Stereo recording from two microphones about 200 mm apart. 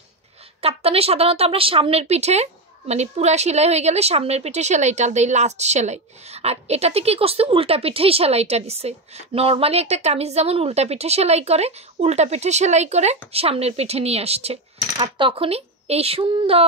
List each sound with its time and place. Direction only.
0.6 s speech: 30° right (ahead or behind)